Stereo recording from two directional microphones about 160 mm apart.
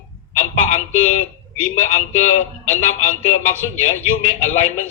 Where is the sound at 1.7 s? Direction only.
45° left (ahead or behind).